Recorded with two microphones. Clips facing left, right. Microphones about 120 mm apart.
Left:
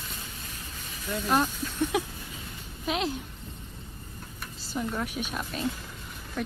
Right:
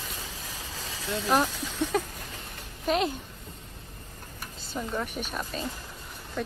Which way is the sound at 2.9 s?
Centre (ahead or behind).